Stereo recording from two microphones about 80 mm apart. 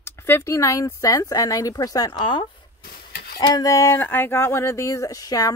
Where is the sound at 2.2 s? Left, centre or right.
Left.